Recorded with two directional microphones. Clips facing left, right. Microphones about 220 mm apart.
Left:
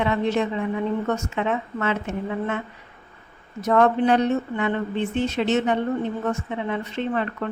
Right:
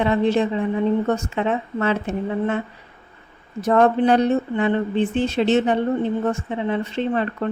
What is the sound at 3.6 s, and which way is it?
A woman's voice, 35° right (ahead or behind).